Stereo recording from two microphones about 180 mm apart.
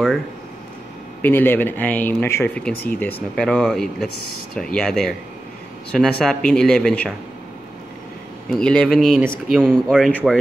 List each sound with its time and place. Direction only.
1.2 s speech: 10° left (ahead or behind)
8.5 s speech: 5° left (ahead or behind)